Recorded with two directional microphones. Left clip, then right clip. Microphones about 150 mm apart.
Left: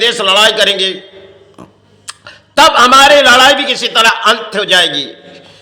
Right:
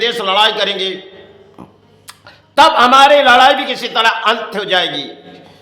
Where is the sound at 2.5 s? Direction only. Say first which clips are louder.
Left 2 dB; 15° left (ahead or behind).